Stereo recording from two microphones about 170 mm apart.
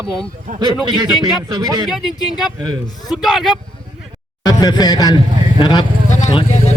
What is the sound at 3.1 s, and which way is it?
Speech, centre (ahead or behind).